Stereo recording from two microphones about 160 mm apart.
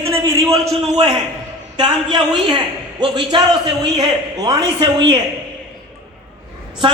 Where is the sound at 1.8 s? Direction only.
25° right (ahead or behind).